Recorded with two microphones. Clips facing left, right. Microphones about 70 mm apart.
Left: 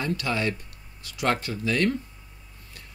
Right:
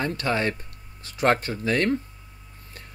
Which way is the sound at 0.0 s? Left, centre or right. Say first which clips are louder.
Right 2 dB; right.